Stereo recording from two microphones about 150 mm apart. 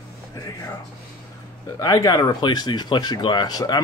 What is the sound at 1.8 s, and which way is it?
Speech, 25° left (ahead or behind).